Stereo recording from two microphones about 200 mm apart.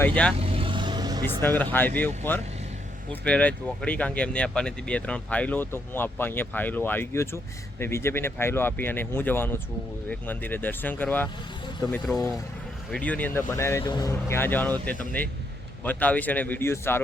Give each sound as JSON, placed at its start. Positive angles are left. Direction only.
{"t": 0.0, "sound": "speech", "side_deg": 5}
{"t": 0.3, "sound": "vehicle", "side_deg": -30}
{"t": 1.2, "sound": "speech", "side_deg": 10}